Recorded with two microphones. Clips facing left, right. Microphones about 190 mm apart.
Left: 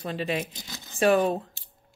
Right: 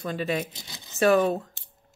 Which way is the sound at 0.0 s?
40° right (ahead or behind).